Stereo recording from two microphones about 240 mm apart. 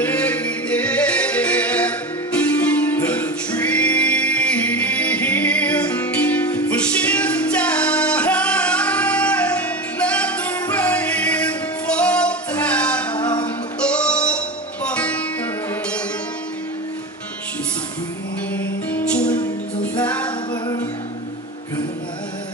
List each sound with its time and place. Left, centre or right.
0.0 s music: centre
13.2 s music: centre
13.8 s music: centre
18.5 s music: centre